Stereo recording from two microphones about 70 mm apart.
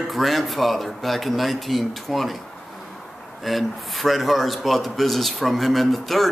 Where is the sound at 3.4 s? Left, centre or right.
Centre.